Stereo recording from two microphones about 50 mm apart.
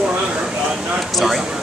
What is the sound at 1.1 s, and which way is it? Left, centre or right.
Speech, centre.